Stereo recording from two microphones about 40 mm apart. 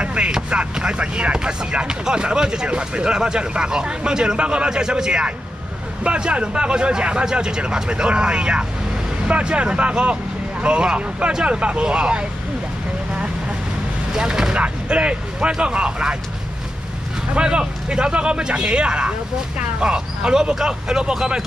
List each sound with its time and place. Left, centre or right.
0.0 s vehicle: right
0.5 s speech: right
14.1 s speech: centre
14.6 s speech: right
17.4 s speech: right